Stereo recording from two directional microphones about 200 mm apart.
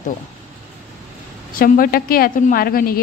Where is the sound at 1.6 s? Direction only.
45° left (ahead or behind).